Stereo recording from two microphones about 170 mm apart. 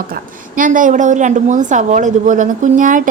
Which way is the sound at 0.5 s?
50° right (ahead or behind).